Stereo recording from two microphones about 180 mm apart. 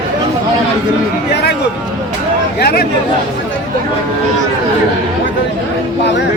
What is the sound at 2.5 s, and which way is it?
Speech, 60° left (ahead or behind).